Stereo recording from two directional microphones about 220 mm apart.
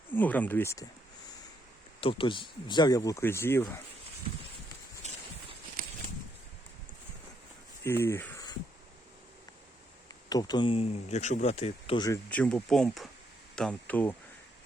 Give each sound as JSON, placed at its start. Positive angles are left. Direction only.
{"t": 0.1, "sound": "speech", "side_deg": 5}
{"t": 2.0, "sound": "speech", "side_deg": 25}
{"t": 5.0, "sound": "clip-clop", "side_deg": -30}
{"t": 5.8, "sound": "a sound", "side_deg": -40}
{"t": 7.9, "sound": "speech", "side_deg": 10}
{"t": 10.2, "sound": "speech", "side_deg": 20}